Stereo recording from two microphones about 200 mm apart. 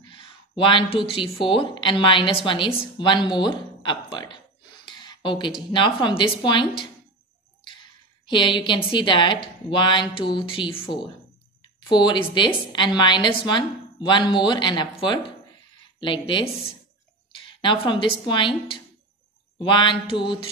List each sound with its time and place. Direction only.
0.1 s a sound: 25° left (ahead or behind)
1.5 s a woman's voice: 25° left (ahead or behind)
4.8 s a sound: 20° left (ahead or behind)
5.7 s a woman's voice: 25° left (ahead or behind)
8.3 s a woman's voice: 25° left (ahead or behind)
16.0 s a woman's voice: 25° left (ahead or behind)
17.5 s a woman's voice: 25° left (ahead or behind)